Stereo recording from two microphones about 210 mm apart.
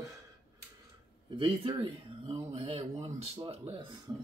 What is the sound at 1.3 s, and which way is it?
Speech, 25° right (ahead or behind).